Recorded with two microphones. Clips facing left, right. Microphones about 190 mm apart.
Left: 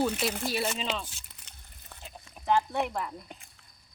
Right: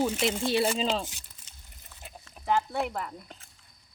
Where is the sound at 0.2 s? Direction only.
20° right (ahead or behind).